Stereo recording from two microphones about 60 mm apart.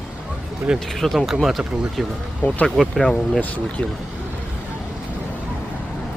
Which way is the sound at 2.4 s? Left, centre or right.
Left.